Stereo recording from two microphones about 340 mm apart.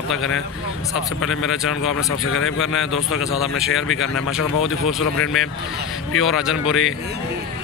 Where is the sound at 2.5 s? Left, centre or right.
Centre.